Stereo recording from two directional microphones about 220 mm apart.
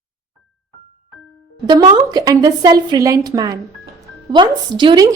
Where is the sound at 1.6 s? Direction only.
20° right (ahead or behind).